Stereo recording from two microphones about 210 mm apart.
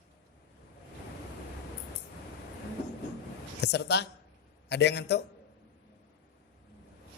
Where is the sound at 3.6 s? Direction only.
55° left (ahead or behind).